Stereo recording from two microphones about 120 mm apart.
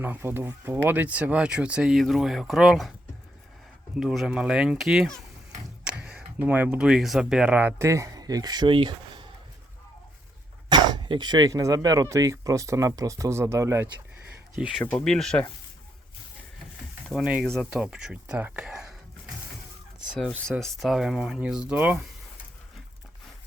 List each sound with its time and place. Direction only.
0.0 s speech: 20° right (ahead or behind); by 2.9 s centre (ahead or behind)
3.9 s speech: centre (ahead or behind)
7.8 s speech: 25° right (ahead or behind); by 9.2 s 45° right (ahead or behind)
10.7 s speech: 35° right (ahead or behind)
14.5 s speech: 5° right (ahead or behind)
17.1 s speech: 5° right (ahead or behind)
20.4 s speech: 5° left (ahead or behind); by 21.9 s 10° right (ahead or behind)